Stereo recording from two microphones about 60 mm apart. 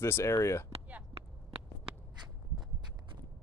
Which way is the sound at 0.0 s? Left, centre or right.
Left.